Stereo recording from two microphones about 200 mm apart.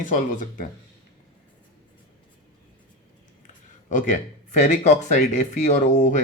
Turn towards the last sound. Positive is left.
turn(degrees=40)  # may be behind; listen again after turning